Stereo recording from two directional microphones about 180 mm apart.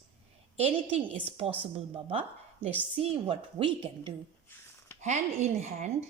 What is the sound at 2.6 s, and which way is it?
A woman's voice, 35° right (ahead or behind).